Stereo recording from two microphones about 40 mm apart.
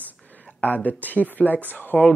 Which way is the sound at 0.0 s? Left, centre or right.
Left.